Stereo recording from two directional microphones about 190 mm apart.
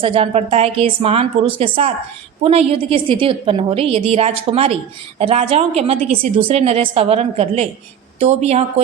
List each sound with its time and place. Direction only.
0.0 s a woman's voice: 30° right (ahead or behind)